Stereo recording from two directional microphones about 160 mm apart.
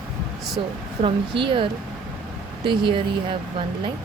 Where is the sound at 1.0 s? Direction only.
35° right (ahead or behind).